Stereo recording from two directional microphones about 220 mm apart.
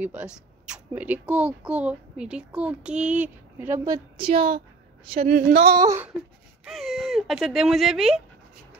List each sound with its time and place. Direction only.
0.0 s speech: 5° right (ahead or behind); by 4.5 s 25° right (ahead or behind)
5.2 s speech: 45° right (ahead or behind)
5.7 s speech: 15° right (ahead or behind)
6.6 s speech: centre (ahead or behind)